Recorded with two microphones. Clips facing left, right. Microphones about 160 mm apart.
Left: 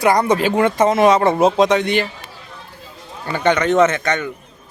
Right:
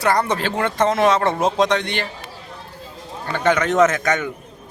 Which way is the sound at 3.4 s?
Centre (ahead or behind).